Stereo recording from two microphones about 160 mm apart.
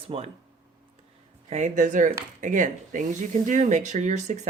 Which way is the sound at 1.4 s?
45° right (ahead or behind).